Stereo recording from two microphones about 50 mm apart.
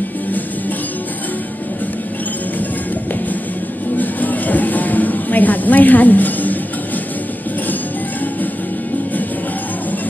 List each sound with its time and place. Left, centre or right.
3.9 s music: left